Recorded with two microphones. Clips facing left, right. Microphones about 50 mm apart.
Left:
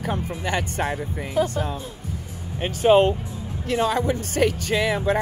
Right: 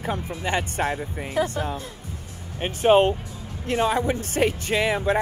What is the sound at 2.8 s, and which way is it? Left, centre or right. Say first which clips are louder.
Speech: left 1 dB; right.